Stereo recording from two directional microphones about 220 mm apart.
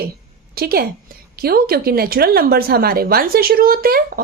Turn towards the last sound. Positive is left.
turn(degrees=-40)  # may be behind; listen again after turning